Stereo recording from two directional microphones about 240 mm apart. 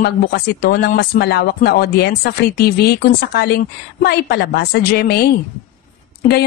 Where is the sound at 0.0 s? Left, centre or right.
Left.